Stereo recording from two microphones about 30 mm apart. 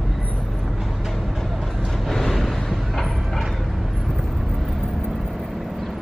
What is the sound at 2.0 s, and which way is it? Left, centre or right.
Vehicle, centre.